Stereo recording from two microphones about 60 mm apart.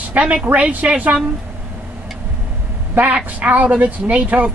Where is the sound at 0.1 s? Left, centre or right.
Right.